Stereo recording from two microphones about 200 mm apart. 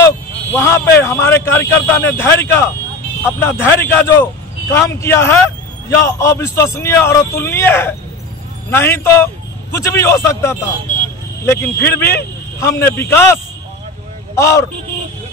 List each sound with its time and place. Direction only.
0.0 s a man's voice: 15° left (ahead or behind)